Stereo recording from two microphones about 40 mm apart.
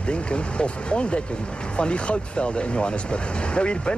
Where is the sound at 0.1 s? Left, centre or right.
Left.